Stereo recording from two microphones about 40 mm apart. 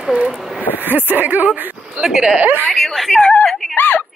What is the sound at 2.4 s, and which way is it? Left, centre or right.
Speech, right.